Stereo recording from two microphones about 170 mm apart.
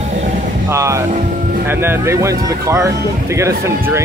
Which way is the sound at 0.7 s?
15° right (ahead or behind).